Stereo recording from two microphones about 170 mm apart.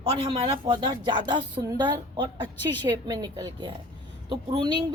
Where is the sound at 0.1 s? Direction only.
35° right (ahead or behind).